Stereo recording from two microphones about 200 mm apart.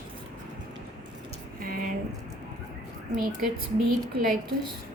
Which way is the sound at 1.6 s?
45° right (ahead or behind).